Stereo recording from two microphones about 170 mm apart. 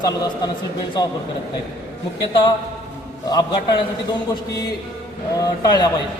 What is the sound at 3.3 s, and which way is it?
Speech, 25° left (ahead or behind).